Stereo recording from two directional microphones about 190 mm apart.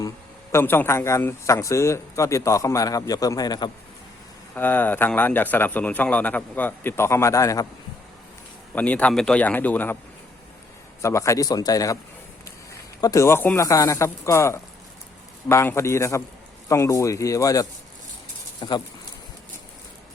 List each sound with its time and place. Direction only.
0.5 s a man's voice: 10° left (ahead or behind)
4.5 s a man's voice: 10° left (ahead or behind)
8.7 s a man's voice: 10° left (ahead or behind)
11.0 s a man's voice: 15° left (ahead or behind)
13.0 s a man's voice: 15° left (ahead or behind)